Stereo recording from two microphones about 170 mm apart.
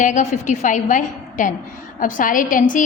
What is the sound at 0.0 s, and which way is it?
A woman's voice, 50° left (ahead or behind).